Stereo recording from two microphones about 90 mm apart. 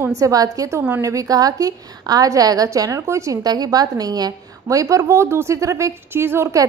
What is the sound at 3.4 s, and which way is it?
A woman's voice, 45° right (ahead or behind).